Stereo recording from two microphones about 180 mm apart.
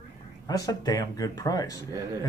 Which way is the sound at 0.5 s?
20° left (ahead or behind).